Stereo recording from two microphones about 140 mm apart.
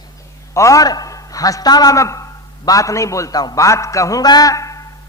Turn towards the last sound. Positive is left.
turn(degrees=25)  # may be behind; listen again after turning